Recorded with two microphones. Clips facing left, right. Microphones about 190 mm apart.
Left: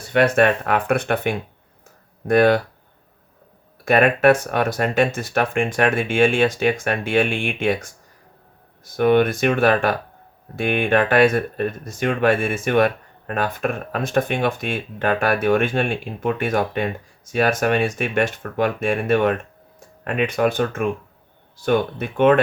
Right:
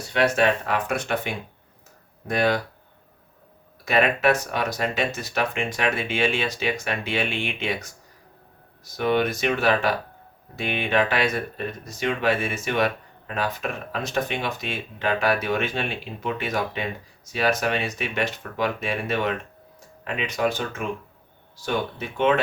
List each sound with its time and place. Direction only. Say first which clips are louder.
0.1 s speech: left 5 dB; 55° left (ahead or behind)
3.8 s speech: left 6 dB; 50° left (ahead or behind)